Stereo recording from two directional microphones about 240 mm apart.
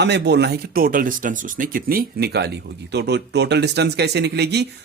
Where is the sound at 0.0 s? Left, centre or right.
Right.